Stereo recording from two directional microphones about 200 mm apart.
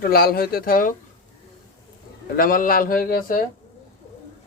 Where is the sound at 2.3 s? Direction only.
45° left (ahead or behind).